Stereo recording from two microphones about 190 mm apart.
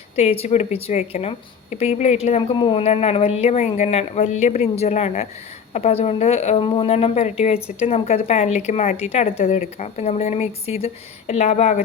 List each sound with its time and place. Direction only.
0.2 s a woman's voice: 35° left (ahead or behind)